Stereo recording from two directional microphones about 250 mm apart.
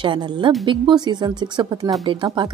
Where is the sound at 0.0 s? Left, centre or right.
Centre.